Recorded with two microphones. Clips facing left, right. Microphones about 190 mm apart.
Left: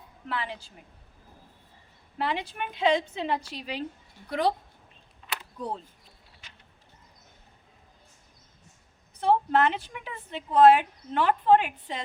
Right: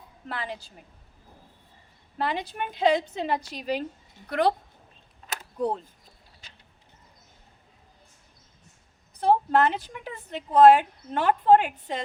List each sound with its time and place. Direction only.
0.3 s a woman's voice: 40° right (ahead or behind)
2.1 s a woman's voice: 40° right (ahead or behind)
4.3 s a woman's voice: 60° right (ahead or behind)
5.3 s a sound: 50° right (ahead or behind)
9.1 s speech: 40° right (ahead or behind)